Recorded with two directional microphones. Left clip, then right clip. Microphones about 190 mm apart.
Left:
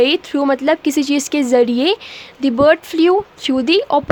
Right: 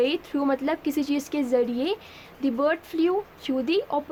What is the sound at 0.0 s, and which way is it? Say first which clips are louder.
Speech: left 10 dB; 35° left (ahead or behind).